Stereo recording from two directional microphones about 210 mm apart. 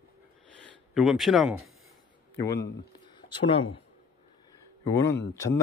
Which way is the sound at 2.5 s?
20° left (ahead or behind).